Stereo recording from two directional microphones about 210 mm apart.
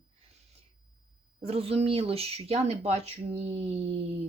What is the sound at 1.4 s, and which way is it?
Speech, 30° right (ahead or behind).